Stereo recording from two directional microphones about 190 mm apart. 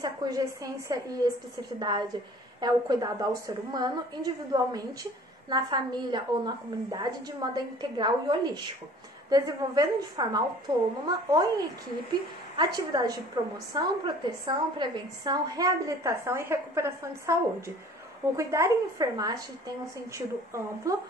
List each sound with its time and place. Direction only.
0.0 s a woman's voice: 20° right (ahead or behind)
20.9 s a woman's voice: 15° right (ahead or behind)